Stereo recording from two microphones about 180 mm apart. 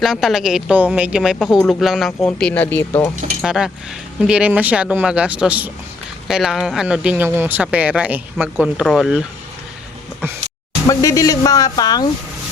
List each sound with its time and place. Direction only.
0.0 s speech: centre (ahead or behind)
3.4 s speech: 5° right (ahead or behind)
10.8 s speech: 20° left (ahead or behind)